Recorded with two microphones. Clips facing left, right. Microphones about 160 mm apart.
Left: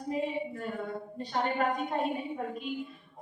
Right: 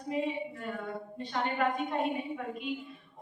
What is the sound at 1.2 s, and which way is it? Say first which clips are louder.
Speech: left 2 dB; 40° left (ahead or behind).